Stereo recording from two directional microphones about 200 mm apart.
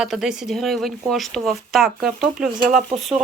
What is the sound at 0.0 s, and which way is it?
Speech, centre (ahead or behind).